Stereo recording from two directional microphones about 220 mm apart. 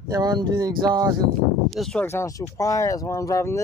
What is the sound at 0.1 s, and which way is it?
Speech, 20° right (ahead or behind).